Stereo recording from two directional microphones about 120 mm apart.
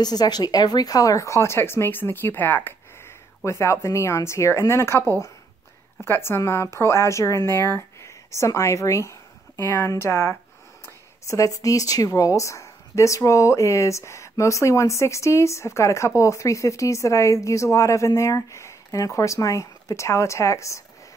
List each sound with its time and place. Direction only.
0.0 s a woman's voice: 35° left (ahead or behind)